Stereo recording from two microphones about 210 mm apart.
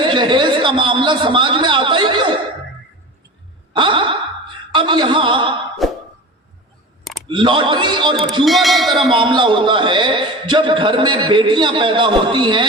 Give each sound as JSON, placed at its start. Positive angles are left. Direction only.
{"t": 0.0, "sound": "a man's voice", "side_deg": -20}
{"t": 3.7, "sound": "sigh", "side_deg": -20}
{"t": 4.7, "sound": "speech", "side_deg": -20}
{"t": 5.8, "sound": "cough", "side_deg": 0}
{"t": 7.3, "sound": "a man's voice", "side_deg": -25}
{"t": 8.4, "sound": "a sound", "side_deg": 0}
{"t": 9.2, "sound": "a man's voice", "side_deg": -25}